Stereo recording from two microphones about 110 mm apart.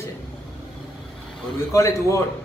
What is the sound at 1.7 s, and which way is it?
Speech, 25° left (ahead or behind).